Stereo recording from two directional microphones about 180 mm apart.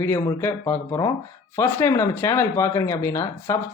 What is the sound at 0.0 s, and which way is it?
Speech, 15° left (ahead or behind).